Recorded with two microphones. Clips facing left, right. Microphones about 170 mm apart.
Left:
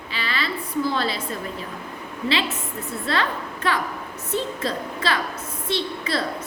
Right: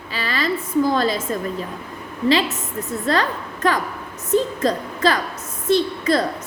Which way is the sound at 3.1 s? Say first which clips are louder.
Right 4 dB; 45° right (ahead or behind).